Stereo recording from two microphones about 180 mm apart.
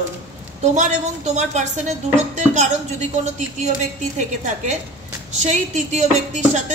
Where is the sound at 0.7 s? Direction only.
40° right (ahead or behind).